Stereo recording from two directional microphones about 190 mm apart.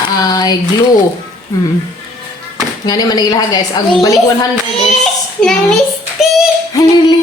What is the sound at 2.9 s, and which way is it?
Speech, 20° left (ahead or behind).